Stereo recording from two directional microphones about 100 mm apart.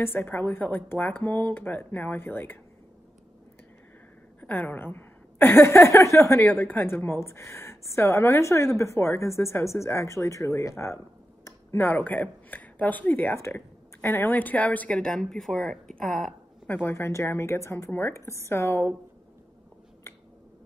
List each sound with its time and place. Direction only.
0.0 s a woman's voice: 20° left (ahead or behind)
4.4 s a woman's voice: 15° left (ahead or behind); by 11.0 s 30° left (ahead or behind)
11.4 s speech: 20° left (ahead or behind); by 16.3 s centre (ahead or behind)
16.6 s a woman's voice: 20° left (ahead or behind)